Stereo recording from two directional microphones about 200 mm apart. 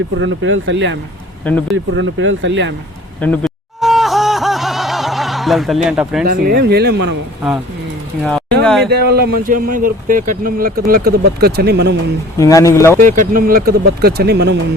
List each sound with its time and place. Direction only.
0.2 s speech: 75° right (ahead or behind)
1.5 s speech: 5° left (ahead or behind)
1.7 s speech: 75° right (ahead or behind)
3.2 s a sound: 5° left (ahead or behind)
6.2 s speech: 50° right (ahead or behind)
8.2 s speech: centre (ahead or behind)
8.9 s speech: 50° right (ahead or behind)
12.4 s speech: 15° left (ahead or behind)
13.0 s speech: 40° right (ahead or behind)